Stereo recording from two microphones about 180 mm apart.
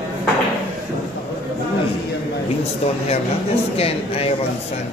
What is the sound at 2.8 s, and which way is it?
Speech, 35° left (ahead or behind).